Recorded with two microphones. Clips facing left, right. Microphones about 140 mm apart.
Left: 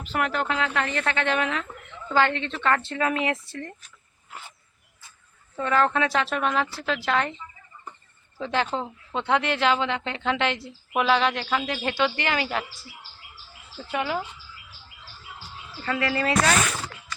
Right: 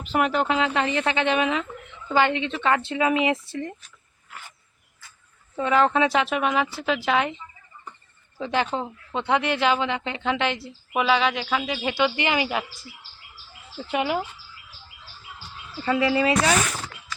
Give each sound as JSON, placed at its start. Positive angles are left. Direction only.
{"t": 0.0, "sound": "speech", "side_deg": -20}
{"t": 5.5, "sound": "speech", "side_deg": -15}
{"t": 8.4, "sound": "a woman's voice", "side_deg": -10}
{"t": 13.9, "sound": "speech", "side_deg": -15}
{"t": 15.8, "sound": "speech", "side_deg": -15}